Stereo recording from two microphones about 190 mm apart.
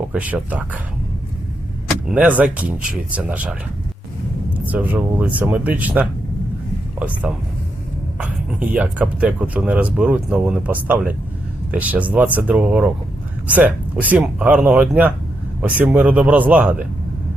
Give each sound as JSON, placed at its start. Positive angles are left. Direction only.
{"t": 0.1, "sound": "speech", "side_deg": -5}
{"t": 2.0, "sound": "speech", "side_deg": -10}
{"t": 4.5, "sound": "speech", "side_deg": -10}